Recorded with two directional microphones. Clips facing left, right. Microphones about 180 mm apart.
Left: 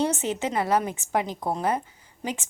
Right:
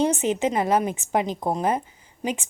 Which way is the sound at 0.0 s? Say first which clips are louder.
Right 4 dB; 20° right (ahead or behind).